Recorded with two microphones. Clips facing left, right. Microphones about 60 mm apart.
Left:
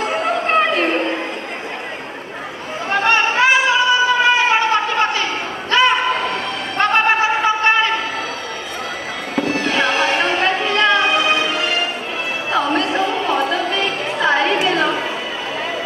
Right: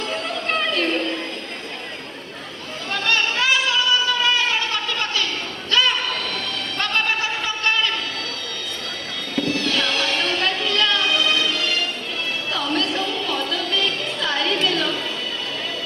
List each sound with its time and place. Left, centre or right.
0.0 s chatter: left
2.9 s a sound: left
9.3 s music: left
12.5 s chatter: left